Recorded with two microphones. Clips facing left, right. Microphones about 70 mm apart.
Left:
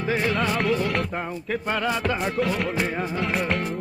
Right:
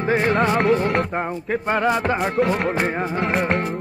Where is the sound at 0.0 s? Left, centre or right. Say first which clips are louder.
Right 5 dB; right.